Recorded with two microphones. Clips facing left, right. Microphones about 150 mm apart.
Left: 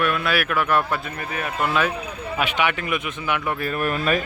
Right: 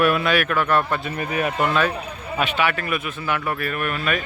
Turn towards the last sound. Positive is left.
turn(degrees=35)  # may be behind; listen again after turning